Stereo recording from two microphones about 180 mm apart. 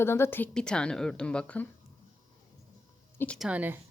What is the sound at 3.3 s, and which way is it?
Speech, 5° right (ahead or behind).